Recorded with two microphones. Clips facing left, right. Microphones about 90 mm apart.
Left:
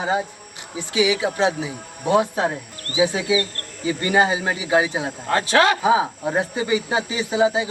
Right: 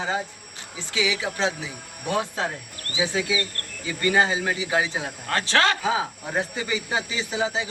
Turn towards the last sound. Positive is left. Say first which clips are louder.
# left 7 dB
turn(degrees=20)  # may be behind; listen again after turning